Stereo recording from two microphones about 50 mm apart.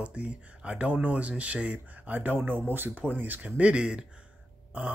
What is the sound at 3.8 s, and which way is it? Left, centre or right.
Speech, centre.